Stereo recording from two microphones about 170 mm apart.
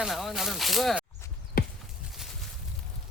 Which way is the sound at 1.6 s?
60° left (ahead or behind).